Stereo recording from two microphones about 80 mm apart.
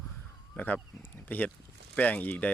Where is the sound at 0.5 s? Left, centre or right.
Left.